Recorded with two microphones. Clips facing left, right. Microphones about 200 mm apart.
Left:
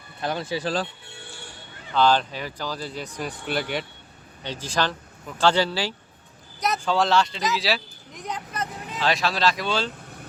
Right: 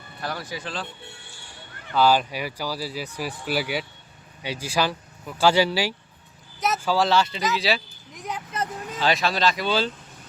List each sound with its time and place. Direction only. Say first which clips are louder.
0.2 s speech: left 5 dB; 20° left (ahead or behind); by 0.9 s 40° left (ahead or behind)
1.9 s speech: right 1 dB; 10° right (ahead or behind)